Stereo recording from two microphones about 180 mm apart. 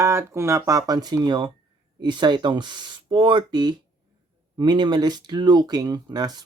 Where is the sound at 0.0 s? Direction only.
15° right (ahead or behind).